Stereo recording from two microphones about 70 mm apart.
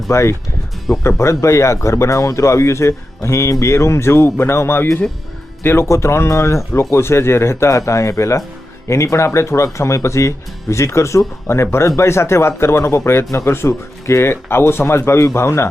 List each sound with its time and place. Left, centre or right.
0.1 s speech: left